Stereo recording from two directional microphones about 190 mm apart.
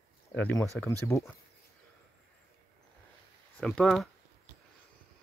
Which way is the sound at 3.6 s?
5° left (ahead or behind).